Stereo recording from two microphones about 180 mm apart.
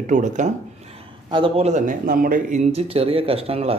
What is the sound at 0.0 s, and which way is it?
Speech, 45° right (ahead or behind).